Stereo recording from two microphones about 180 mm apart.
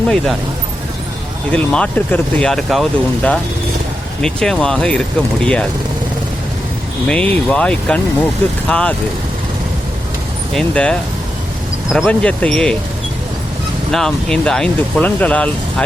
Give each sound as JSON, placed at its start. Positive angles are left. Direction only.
{"t": 1.5, "sound": "speech", "side_deg": 5}
{"t": 4.2, "sound": "speech", "side_deg": 5}
{"t": 7.1, "sound": "speech", "side_deg": 5}
{"t": 10.5, "sound": "speech", "side_deg": 5}
{"t": 11.9, "sound": "speech", "side_deg": 5}
{"t": 13.9, "sound": "speech", "side_deg": 5}